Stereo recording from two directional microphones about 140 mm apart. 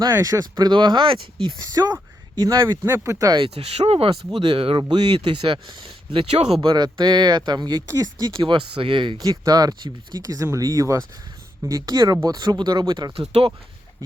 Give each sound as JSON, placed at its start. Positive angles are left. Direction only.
{"t": 0.1, "sound": "speech", "side_deg": -20}
{"t": 3.3, "sound": "speech", "side_deg": -45}
{"t": 6.1, "sound": "speech", "side_deg": -50}